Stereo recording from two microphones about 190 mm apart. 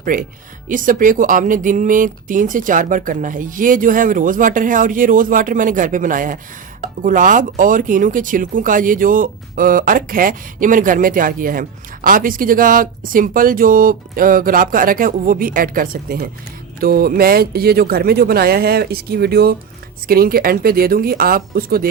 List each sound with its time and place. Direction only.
0.0 s speech: 45° right (ahead or behind)